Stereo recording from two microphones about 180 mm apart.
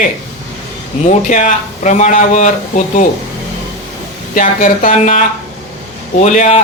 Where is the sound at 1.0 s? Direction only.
45° left (ahead or behind).